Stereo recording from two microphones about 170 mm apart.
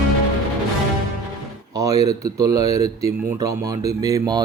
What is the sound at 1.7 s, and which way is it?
Speech, 20° right (ahead or behind).